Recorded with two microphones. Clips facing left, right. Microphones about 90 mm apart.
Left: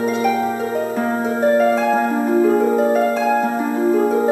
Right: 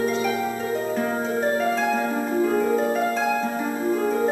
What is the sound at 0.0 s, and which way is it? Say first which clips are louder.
Harp: left 5 dB; 50° left (ahead or behind).